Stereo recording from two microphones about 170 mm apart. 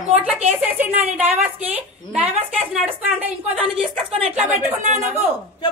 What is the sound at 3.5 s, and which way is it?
Speech, 35° right (ahead or behind).